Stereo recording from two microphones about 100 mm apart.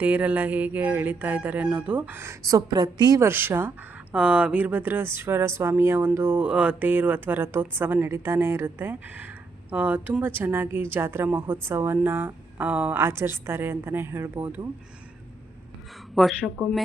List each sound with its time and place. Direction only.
0.0 s speech: 15° right (ahead or behind)
2.5 s a woman's voice: 40° right (ahead or behind)
3.2 s speech: 20° right (ahead or behind)
16.2 s speech: centre (ahead or behind)